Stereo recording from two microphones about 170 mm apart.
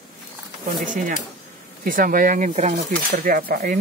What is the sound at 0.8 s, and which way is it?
Speech, 50° right (ahead or behind).